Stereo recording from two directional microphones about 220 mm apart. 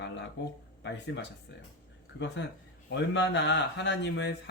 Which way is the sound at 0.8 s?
55° left (ahead or behind).